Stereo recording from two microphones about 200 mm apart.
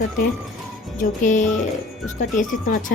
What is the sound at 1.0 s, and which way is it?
A woman's voice, 40° left (ahead or behind).